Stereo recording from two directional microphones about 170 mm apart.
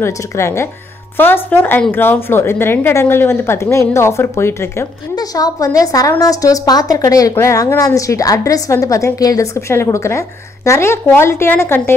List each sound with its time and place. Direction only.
0.0 s a woman's voice: 15° left (ahead or behind)